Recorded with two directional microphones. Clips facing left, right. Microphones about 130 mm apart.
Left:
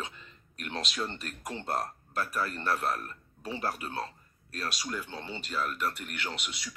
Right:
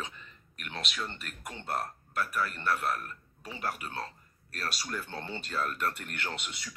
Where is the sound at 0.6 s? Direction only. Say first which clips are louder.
Left 3 dB; 35° left (ahead or behind).